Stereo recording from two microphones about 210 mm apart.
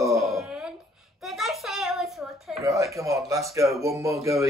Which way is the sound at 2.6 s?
15° right (ahead or behind).